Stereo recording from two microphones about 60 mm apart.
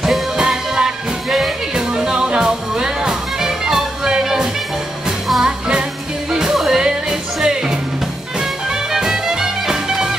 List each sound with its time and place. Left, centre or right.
0.0 s music: centre
8.9 s music: centre